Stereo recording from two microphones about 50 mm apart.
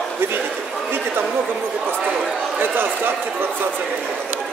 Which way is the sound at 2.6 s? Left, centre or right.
Right.